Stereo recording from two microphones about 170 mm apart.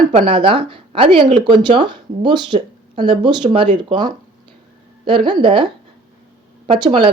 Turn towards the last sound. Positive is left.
turn(degrees=-25)  # may be behind; listen again after turning